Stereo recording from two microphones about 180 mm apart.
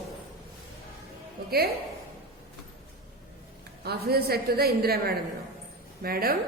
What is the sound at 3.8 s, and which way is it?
A woman's voice, 60° right (ahead or behind).